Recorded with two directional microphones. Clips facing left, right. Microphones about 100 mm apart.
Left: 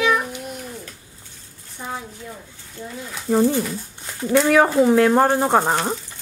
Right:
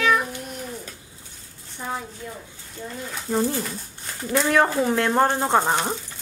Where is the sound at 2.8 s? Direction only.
Centre (ahead or behind).